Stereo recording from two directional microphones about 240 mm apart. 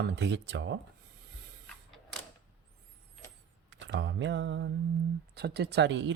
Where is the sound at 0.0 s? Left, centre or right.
Right.